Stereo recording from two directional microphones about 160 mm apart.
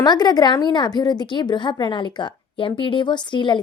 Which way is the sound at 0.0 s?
25° left (ahead or behind).